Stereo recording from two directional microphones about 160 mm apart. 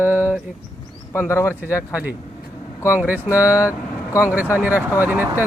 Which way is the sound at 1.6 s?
10° right (ahead or behind).